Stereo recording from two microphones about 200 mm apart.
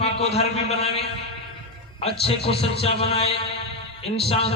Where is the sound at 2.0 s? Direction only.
30° left (ahead or behind).